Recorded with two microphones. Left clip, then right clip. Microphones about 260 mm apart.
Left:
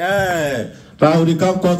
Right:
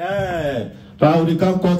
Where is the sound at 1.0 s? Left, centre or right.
Left.